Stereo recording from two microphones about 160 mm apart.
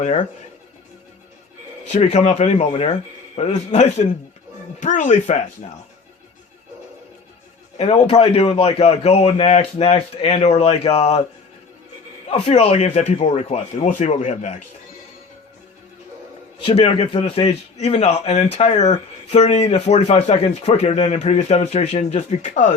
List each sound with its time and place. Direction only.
1.8 s a man's voice: 45° left (ahead or behind)
7.8 s a man's voice: 40° left (ahead or behind)
12.3 s speech: 40° left (ahead or behind)
16.6 s a man's voice: 35° left (ahead or behind)